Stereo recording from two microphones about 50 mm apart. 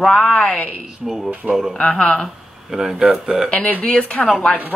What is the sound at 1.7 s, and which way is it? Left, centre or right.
Speech, left.